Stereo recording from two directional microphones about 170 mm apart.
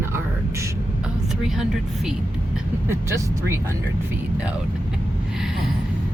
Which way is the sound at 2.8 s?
15° right (ahead or behind).